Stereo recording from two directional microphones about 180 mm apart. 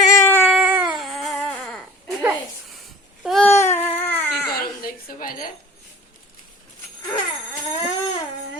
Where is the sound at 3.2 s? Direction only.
Centre (ahead or behind).